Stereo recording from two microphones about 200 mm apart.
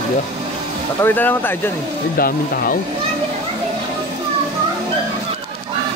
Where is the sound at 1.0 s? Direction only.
10° left (ahead or behind).